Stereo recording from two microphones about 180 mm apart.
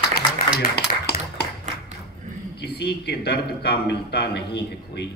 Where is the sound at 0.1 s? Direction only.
60° left (ahead or behind).